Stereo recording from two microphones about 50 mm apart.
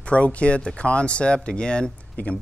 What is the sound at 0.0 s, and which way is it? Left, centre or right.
Speech, left.